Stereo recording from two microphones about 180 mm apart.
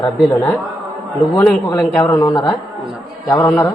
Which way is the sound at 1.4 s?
5° left (ahead or behind).